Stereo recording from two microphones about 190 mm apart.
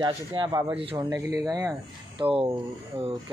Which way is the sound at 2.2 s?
30° right (ahead or behind).